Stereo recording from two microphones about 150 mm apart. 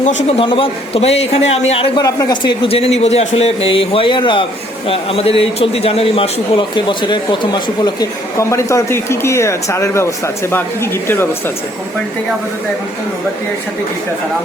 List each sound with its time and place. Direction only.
0.0 s speech: 50° left (ahead or behind)
0.4 s speech: 35° left (ahead or behind)
2.0 s a man's voice: 25° left (ahead or behind)